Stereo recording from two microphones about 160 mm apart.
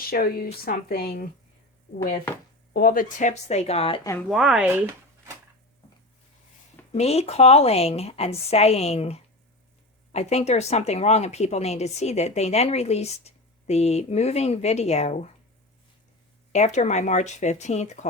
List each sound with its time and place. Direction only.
0.1 s speech: 70° left (ahead or behind)
2.7 s speech: 65° left (ahead or behind); by 4.0 s 35° left (ahead or behind)
4.3 s speech: centre (ahead or behind)
6.9 s a woman's voice: 40° left (ahead or behind)
16.5 s speech: 45° left (ahead or behind)